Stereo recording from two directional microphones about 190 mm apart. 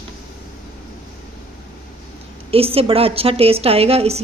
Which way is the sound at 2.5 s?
30° right (ahead or behind).